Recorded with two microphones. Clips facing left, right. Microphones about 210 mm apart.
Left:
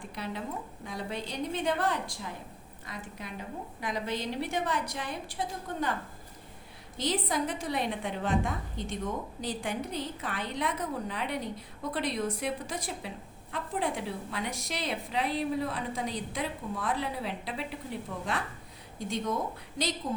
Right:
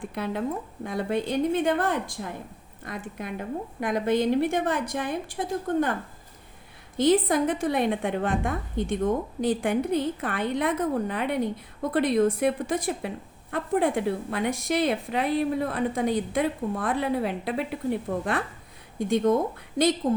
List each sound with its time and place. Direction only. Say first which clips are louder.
0.1 s a woman's voice: right 7 dB; 55° right (ahead or behind)
18.9 s a woman's voice: right 10 dB; 55° right (ahead or behind)